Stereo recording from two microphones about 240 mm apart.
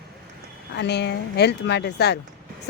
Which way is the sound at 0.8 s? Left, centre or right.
Left.